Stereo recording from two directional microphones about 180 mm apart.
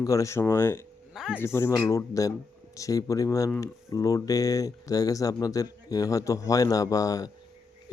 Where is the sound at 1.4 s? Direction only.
15° left (ahead or behind).